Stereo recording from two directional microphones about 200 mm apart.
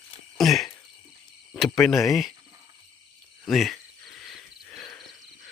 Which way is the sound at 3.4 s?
Centre (ahead or behind).